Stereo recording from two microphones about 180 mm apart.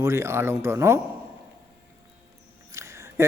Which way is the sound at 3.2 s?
15° right (ahead or behind).